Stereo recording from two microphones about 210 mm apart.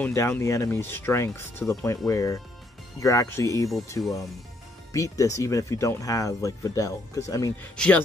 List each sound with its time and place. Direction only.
0.0 s speech: 10° left (ahead or behind)
7.7 s speech: 5° left (ahead or behind)